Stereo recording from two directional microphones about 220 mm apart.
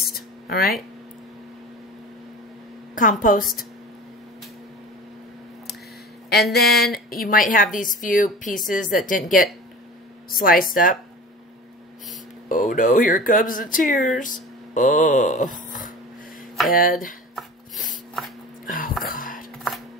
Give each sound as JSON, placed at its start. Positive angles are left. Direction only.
{"t": 0.1, "sound": "a sound", "side_deg": 45}
{"t": 2.9, "sound": "speech", "side_deg": 35}
{"t": 6.5, "sound": "speech", "side_deg": 45}
{"t": 12.4, "sound": "speech", "side_deg": 35}
{"t": 18.7, "sound": "a sound", "side_deg": 40}
{"t": 19.0, "sound": "whispering", "side_deg": 40}